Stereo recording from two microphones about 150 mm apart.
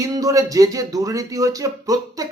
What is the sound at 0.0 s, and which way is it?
Speech, 25° right (ahead or behind).